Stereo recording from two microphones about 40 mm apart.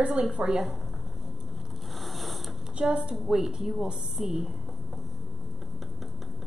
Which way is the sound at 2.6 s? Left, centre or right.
Centre.